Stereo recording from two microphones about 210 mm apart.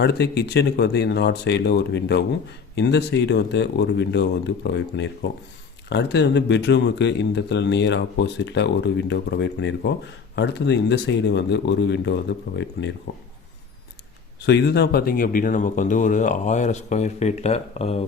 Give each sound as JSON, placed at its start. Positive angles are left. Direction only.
{"t": 0.0, "sound": "speech", "side_deg": 50}
{"t": 14.4, "sound": "speech", "side_deg": 55}